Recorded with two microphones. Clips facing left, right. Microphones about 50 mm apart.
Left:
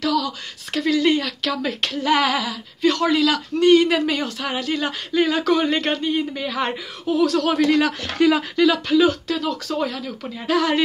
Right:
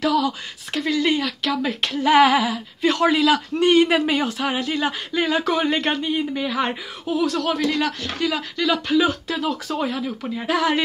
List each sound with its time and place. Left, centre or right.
0.0 s speech: right
0.7 s speech: centre
10.2 s speech: centre